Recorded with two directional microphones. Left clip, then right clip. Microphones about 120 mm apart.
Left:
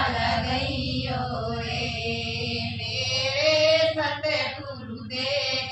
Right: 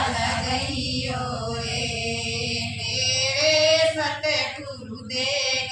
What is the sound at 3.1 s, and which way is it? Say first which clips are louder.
Child singing: right 1 dB; 10° right (ahead or behind).